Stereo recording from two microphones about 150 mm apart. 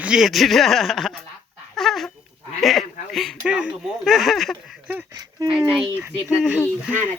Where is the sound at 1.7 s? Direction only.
Centre (ahead or behind).